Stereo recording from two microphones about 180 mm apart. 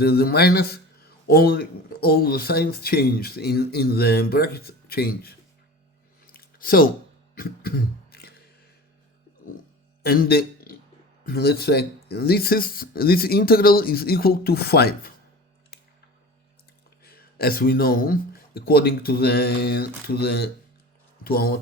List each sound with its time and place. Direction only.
0.0 s speech: 60° left (ahead or behind)
6.2 s a sound: 55° left (ahead or behind)
10.0 s a man's voice: 60° left (ahead or behind)
17.0 s speech: 55° left (ahead or behind)